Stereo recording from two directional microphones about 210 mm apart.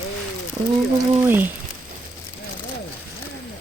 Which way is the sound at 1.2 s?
10° right (ahead or behind).